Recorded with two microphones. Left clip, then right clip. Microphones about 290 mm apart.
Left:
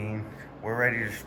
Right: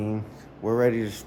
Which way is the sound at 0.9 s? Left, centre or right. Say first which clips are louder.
Right 1 dB; centre.